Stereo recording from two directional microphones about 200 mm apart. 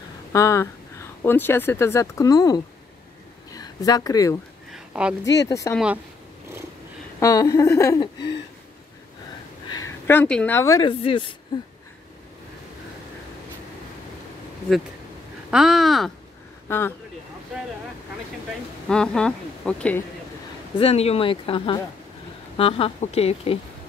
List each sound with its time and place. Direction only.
0.3 s speech: 15° left (ahead or behind)
4.7 s a sound: 5° right (ahead or behind)
5.2 s speech: 15° left (ahead or behind)
7.2 s speech: 15° left (ahead or behind)
10.0 s speech: 10° left (ahead or behind); by 11.3 s 25° left (ahead or behind)
15.5 s a woman's voice: centre (ahead or behind)
16.6 s speech: 10° left (ahead or behind)
18.9 s a woman's voice: 5° left (ahead or behind)
20.7 s speech: 30° left (ahead or behind)